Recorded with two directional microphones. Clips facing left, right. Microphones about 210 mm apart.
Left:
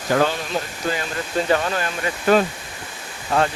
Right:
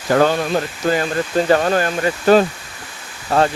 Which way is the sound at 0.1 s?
50° right (ahead or behind).